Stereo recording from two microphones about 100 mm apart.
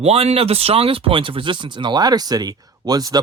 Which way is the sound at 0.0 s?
90° right.